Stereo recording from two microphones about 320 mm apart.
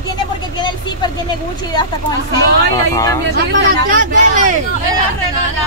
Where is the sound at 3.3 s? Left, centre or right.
Right.